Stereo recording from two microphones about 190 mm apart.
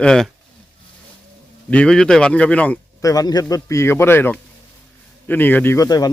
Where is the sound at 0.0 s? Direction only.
5° left (ahead or behind).